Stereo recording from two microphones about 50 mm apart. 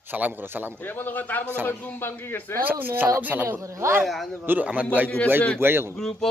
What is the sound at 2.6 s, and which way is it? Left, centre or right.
Speech, right.